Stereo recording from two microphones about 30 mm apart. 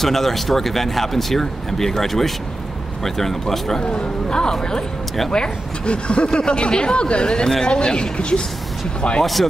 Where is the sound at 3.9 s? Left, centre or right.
Left.